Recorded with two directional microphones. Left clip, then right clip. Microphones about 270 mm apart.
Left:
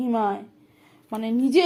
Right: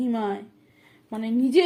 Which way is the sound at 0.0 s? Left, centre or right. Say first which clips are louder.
Left 3 dB; centre.